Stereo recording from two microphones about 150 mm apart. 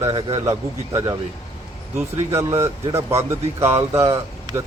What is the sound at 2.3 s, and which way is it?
Speech, 20° right (ahead or behind).